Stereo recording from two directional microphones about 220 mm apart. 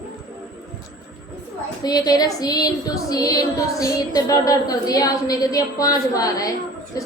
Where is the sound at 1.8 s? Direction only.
15° left (ahead or behind).